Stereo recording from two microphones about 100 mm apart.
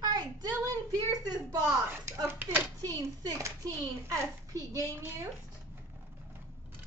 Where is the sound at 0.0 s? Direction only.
45° right (ahead or behind).